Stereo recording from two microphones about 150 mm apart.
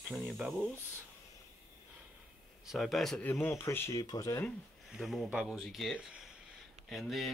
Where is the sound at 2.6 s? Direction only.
Centre (ahead or behind).